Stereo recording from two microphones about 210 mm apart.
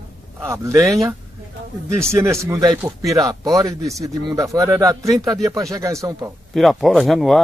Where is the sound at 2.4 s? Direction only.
15° right (ahead or behind).